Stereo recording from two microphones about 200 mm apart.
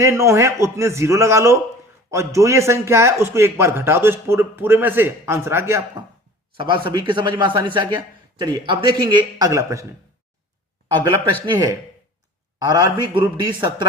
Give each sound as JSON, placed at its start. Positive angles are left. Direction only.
{"t": 0.0, "sound": "a man's voice", "side_deg": -15}
{"t": 6.6, "sound": "speech", "side_deg": -25}
{"t": 11.0, "sound": "speech", "side_deg": -25}